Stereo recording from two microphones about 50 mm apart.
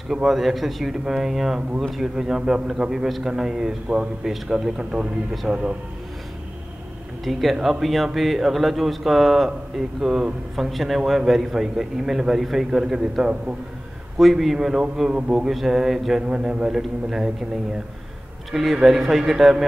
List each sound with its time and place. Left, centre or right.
0.1 s a man's voice: centre
4.6 s a man's voice: centre
7.2 s a man's voice: centre
14.1 s speech: centre
15.0 s a man's voice: centre
18.5 s speech: centre